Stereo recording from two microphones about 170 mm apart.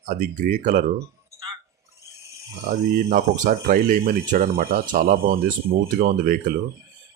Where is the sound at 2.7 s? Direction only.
60° right (ahead or behind).